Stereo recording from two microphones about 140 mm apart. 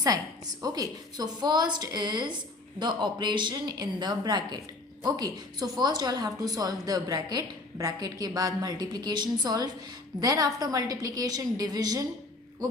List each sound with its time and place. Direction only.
0.6 s a woman's voice: 25° right (ahead or behind)